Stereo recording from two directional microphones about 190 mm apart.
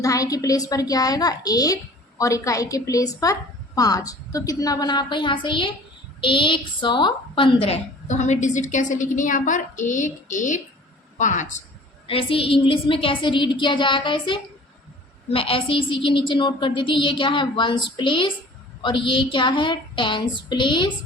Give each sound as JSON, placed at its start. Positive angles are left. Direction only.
{"t": 0.0, "sound": "a woman's voice", "side_deg": 15}
{"t": 12.0, "sound": "a woman's voice", "side_deg": 30}